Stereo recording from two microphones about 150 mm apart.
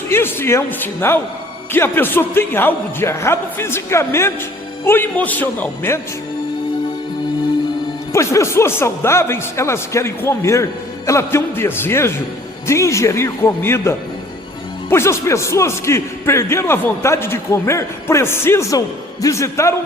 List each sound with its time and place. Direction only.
0.1 s a man's voice: 15° left (ahead or behind)
8.1 s a man's voice: 20° left (ahead or behind)